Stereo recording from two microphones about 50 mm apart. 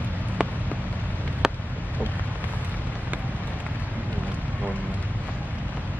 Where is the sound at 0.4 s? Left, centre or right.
Centre.